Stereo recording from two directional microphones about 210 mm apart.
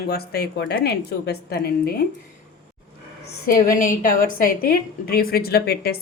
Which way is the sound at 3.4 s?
45° left (ahead or behind).